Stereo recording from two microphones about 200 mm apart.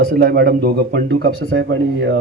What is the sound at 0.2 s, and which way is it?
A man's voice, 50° right (ahead or behind).